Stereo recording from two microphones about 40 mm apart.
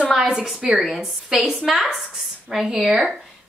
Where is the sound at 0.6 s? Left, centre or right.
Centre.